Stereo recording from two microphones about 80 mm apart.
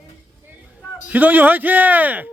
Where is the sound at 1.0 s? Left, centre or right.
Right.